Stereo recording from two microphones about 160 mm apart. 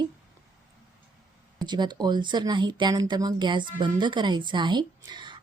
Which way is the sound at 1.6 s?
25° right (ahead or behind).